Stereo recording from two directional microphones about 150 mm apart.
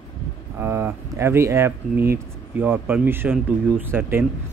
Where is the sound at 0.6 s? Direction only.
15° right (ahead or behind).